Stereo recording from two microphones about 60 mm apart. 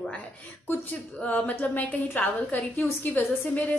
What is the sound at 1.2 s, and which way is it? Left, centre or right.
A woman's voice, left.